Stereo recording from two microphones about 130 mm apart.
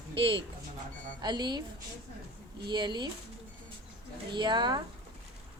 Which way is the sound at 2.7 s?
35° right (ahead or behind).